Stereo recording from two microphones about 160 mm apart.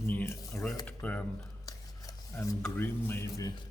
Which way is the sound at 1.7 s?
20° left (ahead or behind).